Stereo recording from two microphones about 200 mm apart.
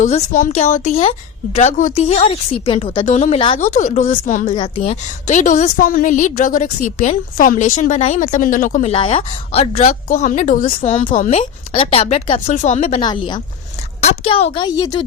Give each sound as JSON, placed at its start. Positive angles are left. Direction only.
{"t": 0.0, "sound": "a woman's voice", "side_deg": 40}
{"t": 3.6, "sound": "a woman's voice", "side_deg": 40}
{"t": 8.9, "sound": "speech", "side_deg": 25}
{"t": 9.9, "sound": "a woman's voice", "side_deg": 40}
{"t": 10.8, "sound": "a woman's voice", "side_deg": 30}
{"t": 13.0, "sound": "speech", "side_deg": 20}